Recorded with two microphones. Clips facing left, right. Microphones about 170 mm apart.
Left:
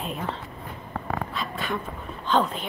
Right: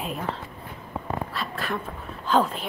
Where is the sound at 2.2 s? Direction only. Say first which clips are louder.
Right 1 dB; 5° right (ahead or behind).